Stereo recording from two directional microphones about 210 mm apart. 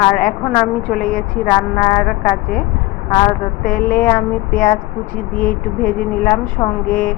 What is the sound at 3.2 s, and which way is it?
Speech, 40° left (ahead or behind).